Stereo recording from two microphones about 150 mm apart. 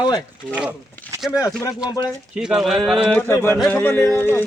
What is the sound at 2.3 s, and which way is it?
Speech, 5° right (ahead or behind).